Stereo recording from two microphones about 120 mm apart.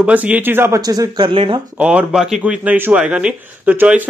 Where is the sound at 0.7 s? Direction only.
30° right (ahead or behind).